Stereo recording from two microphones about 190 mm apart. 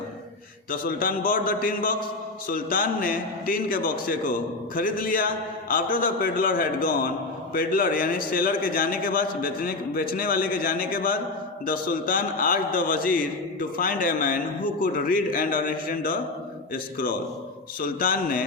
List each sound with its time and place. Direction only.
0.7 s a man's voice: 50° left (ahead or behind)